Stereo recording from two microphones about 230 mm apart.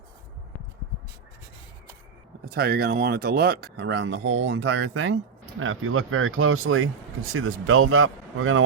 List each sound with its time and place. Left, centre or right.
2.4 s speech: right